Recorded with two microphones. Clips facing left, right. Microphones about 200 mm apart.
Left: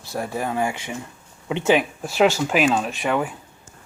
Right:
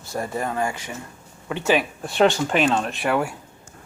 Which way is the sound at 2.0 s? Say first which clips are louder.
Even; 5° left (ahead or behind).